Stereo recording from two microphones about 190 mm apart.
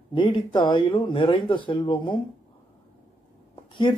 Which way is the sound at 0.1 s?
25° left (ahead or behind).